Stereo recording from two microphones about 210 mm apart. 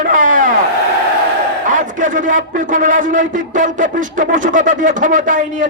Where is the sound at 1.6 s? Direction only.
40° right (ahead or behind).